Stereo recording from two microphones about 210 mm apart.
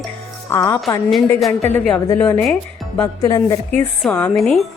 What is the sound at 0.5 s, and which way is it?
Speech, 15° left (ahead or behind).